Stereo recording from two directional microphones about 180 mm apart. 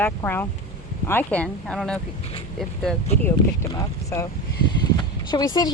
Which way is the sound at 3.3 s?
15° left (ahead or behind).